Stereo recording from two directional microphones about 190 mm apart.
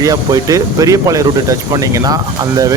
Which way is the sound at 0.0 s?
20° right (ahead or behind).